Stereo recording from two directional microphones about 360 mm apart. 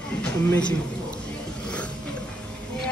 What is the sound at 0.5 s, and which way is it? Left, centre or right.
Speech, centre.